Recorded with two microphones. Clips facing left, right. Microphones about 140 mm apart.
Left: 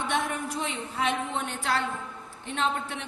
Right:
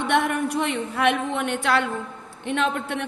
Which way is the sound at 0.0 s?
65° right (ahead or behind).